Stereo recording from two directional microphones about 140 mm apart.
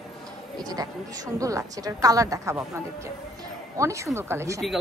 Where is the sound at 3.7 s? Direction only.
20° right (ahead or behind).